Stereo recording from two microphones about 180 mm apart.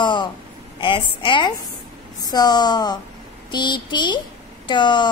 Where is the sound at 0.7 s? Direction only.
25° left (ahead or behind).